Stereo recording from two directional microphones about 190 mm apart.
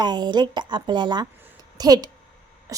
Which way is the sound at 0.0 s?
20° right (ahead or behind).